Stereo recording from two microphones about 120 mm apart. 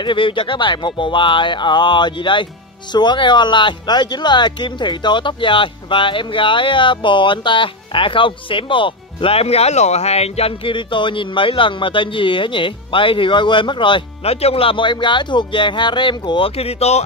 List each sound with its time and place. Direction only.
0.0 s speech: 45° left (ahead or behind); by 17.0 s 60° left (ahead or behind)